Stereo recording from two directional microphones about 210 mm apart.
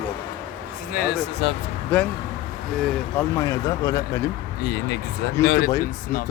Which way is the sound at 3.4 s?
15° left (ahead or behind).